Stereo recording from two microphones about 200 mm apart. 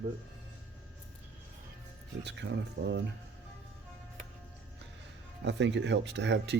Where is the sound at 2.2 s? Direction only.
60° right (ahead or behind).